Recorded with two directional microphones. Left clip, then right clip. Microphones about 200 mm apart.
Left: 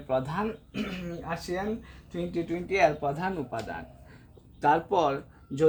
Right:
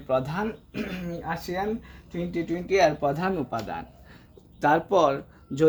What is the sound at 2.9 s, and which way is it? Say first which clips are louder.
Speech: right 4 dB; 40° right (ahead or behind).